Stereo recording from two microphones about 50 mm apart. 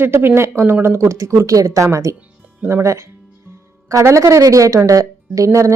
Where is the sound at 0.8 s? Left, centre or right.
Right.